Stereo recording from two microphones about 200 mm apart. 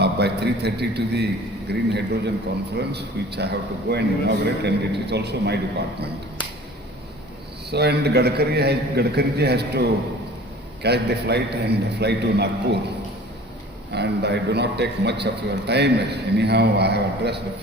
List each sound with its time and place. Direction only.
0.0 s a man's voice: 55° right (ahead or behind)
7.7 s a man's voice: 55° right (ahead or behind)
13.9 s a man's voice: 55° right (ahead or behind)